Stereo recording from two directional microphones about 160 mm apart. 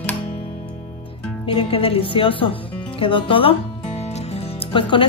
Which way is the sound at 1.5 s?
35° left (ahead or behind).